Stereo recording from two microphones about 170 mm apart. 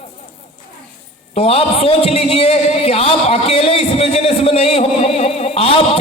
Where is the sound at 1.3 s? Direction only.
35° left (ahead or behind).